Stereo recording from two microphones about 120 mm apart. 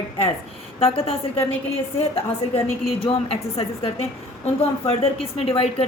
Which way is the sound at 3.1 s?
55° left (ahead or behind).